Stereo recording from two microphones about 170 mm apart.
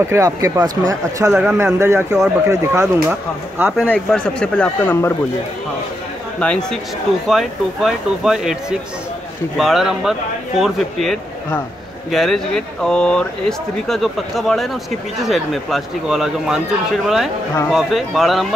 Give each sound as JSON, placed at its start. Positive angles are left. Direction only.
{"t": 0.0, "sound": "speech", "side_deg": -15}
{"t": 1.3, "sound": "speech", "side_deg": -10}
{"t": 3.9, "sound": "speech", "side_deg": 5}
{"t": 6.4, "sound": "speech", "side_deg": 5}